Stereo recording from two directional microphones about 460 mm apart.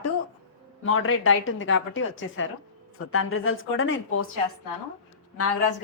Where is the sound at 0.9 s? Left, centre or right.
Left.